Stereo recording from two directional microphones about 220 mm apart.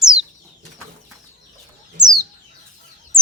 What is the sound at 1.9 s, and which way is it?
Bird, 15° right (ahead or behind).